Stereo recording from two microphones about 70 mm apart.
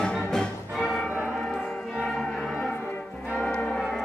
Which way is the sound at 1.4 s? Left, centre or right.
Centre.